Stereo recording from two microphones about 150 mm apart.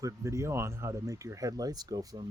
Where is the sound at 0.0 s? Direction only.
20° right (ahead or behind).